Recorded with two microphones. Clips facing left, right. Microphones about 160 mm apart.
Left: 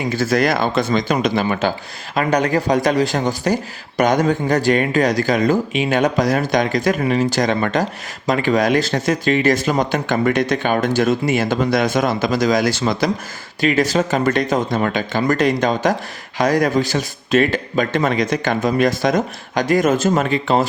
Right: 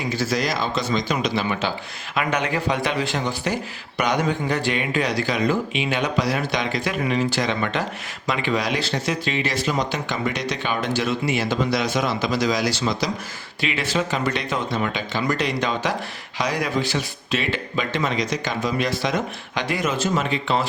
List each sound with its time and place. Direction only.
0.1 s speech: 55° left (ahead or behind)
13.6 s speech: 45° left (ahead or behind)